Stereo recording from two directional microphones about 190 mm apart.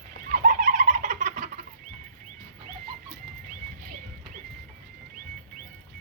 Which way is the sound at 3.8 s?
45° right (ahead or behind).